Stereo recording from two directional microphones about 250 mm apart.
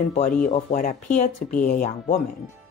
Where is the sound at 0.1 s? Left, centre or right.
Left.